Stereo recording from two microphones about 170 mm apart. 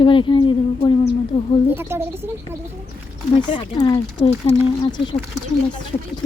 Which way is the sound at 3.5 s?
30° left (ahead or behind).